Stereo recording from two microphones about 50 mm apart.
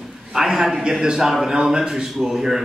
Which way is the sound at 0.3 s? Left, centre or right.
Centre.